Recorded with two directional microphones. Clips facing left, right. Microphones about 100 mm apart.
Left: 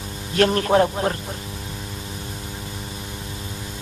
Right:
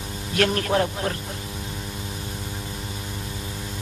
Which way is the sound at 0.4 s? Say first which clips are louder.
Left 5 dB; 35° left (ahead or behind).